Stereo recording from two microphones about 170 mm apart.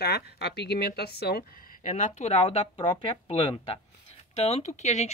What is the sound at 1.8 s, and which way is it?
Speech, 45° left (ahead or behind).